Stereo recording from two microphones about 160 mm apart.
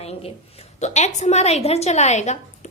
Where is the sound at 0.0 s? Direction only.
40° left (ahead or behind).